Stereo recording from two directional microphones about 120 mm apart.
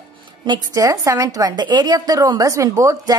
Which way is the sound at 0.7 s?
25° right (ahead or behind).